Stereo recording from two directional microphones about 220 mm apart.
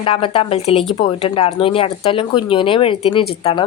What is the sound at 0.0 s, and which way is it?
A woman's voice, 25° left (ahead or behind).